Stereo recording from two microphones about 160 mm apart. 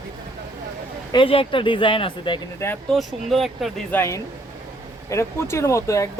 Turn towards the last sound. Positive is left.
turn(degrees=20)  # may be behind; listen again after turning